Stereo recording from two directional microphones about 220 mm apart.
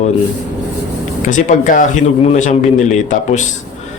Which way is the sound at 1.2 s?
35° left (ahead or behind).